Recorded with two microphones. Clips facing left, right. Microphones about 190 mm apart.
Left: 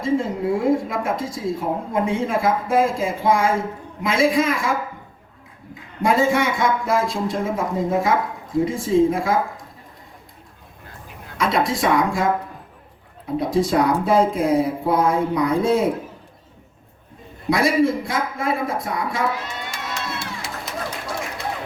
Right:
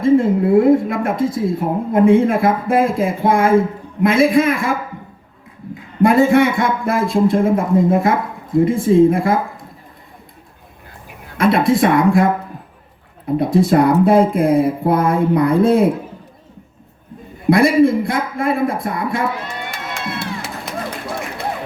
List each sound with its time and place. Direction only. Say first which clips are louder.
0.0 s a woman's voice: right 8 dB; 55° right (ahead or behind)
6.0 s a woman's voice: right 7 dB; 55° right (ahead or behind)
11.3 s a woman's voice: right 7 dB; 55° right (ahead or behind)
17.4 s a woman's voice: right 6 dB; 55° right (ahead or behind)
19.5 s run: right 3 dB; 55° right (ahead or behind)